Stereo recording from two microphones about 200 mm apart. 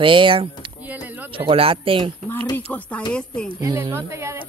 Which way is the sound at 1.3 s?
25° right (ahead or behind).